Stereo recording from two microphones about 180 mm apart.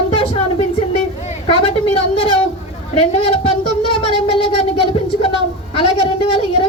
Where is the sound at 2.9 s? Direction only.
30° left (ahead or behind).